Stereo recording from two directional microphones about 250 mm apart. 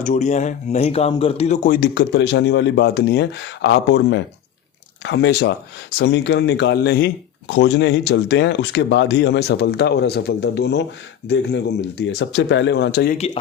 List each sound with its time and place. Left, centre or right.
0.0 s speech: left
13.1 s speech: left